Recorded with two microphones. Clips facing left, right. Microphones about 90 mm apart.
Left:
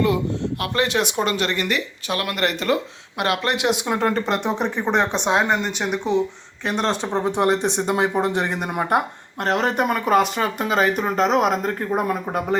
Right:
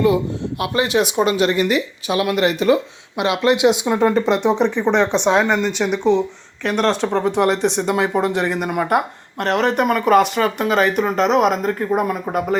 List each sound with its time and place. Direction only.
0.6 s speech: 10° right (ahead or behind)
7.3 s speech: 30° left (ahead or behind)